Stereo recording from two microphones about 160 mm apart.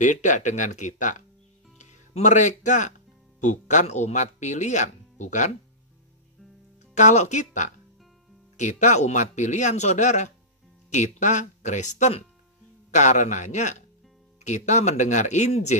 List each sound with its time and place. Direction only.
0.0 s speech: 50° left (ahead or behind)
7.0 s speech: 50° left (ahead or behind)